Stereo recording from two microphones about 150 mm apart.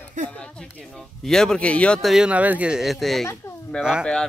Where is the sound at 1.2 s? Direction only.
5° left (ahead or behind).